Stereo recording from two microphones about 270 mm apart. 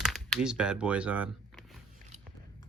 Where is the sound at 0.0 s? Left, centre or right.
Centre.